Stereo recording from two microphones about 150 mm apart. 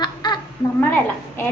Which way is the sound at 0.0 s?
30° left (ahead or behind).